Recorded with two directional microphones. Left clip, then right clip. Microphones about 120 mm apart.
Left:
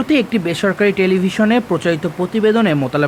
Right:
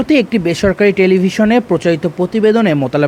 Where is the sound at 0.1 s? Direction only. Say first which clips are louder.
Right 3 dB; 25° right (ahead or behind).